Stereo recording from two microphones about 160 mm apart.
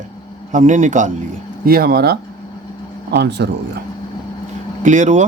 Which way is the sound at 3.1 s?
90° right.